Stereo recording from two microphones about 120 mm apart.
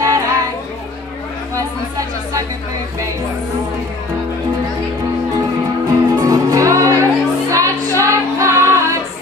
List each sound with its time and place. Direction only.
0.0 s music: 30° right (ahead or behind)
6.1 s music: 30° right (ahead or behind)